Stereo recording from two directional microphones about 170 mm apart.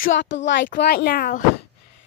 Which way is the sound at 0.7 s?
70° left (ahead or behind).